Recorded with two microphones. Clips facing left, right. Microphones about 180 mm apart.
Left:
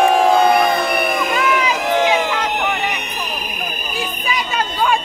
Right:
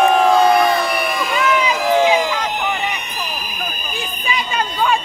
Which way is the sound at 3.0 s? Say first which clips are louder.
Left 1 dB; 65° left (ahead or behind).